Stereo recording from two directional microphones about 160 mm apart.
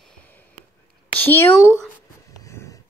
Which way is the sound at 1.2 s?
15° left (ahead or behind).